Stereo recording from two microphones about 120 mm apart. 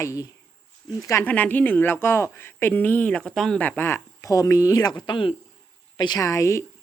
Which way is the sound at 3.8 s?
20° left (ahead or behind).